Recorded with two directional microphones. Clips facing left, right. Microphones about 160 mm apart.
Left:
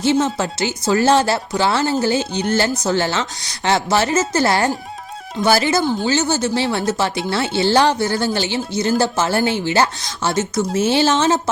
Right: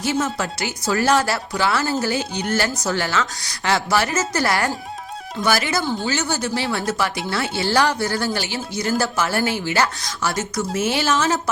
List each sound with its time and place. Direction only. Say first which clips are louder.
0.0 s speech: left 5 dB; 25° left (ahead or behind)
5.8 s speech: left 5 dB; 15° left (ahead or behind)
6.1 s speech: left 5 dB; 25° left (ahead or behind)